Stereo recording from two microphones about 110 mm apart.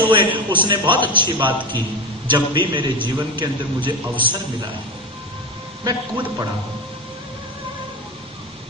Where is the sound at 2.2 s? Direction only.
45° right (ahead or behind).